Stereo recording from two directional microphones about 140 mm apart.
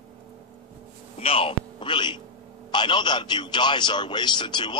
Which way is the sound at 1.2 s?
40° left (ahead or behind).